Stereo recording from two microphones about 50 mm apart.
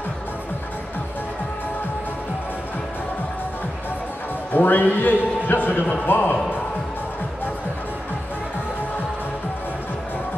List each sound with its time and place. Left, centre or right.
4.6 s a man's voice: left